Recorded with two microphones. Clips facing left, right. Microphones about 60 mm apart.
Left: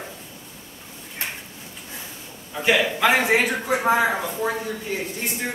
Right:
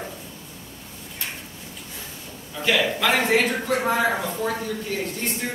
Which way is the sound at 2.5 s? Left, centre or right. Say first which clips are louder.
Left 2 dB; centre.